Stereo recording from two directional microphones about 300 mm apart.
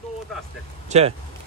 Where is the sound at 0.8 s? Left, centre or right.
Right.